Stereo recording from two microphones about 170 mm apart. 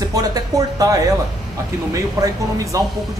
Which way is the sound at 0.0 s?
20° right (ahead or behind).